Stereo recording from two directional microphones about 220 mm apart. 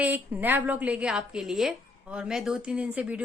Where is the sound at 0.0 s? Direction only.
10° right (ahead or behind).